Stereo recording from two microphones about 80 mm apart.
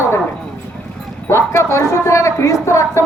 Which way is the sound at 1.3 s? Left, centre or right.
Left.